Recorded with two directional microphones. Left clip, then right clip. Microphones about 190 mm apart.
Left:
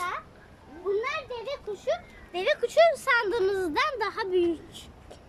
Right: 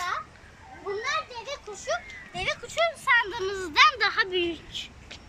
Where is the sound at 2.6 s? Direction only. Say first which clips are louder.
Left 9 dB; 55° left (ahead or behind); by 4.5 s 25° left (ahead or behind).